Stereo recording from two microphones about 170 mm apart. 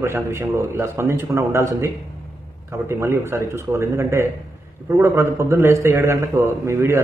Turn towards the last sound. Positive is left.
turn(degrees=-15)  # may be behind; listen again after turning